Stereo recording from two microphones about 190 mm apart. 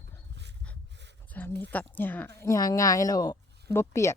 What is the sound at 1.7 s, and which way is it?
Speech, 10° left (ahead or behind).